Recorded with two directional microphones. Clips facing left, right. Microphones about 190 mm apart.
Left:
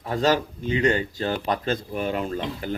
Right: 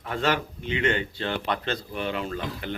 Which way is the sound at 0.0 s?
35° left (ahead or behind).